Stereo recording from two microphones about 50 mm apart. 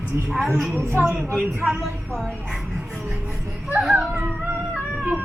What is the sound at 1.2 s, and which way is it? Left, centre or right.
Speech, left.